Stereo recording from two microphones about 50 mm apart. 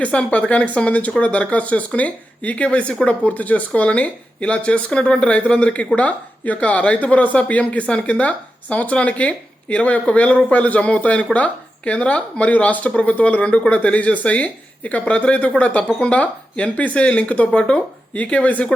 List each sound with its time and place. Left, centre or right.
0.0 s speech: left